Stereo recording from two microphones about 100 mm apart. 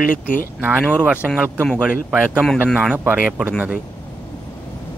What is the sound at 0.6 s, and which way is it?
Speech, 20° right (ahead or behind).